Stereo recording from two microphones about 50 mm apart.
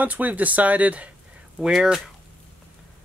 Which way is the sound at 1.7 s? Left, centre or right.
Centre.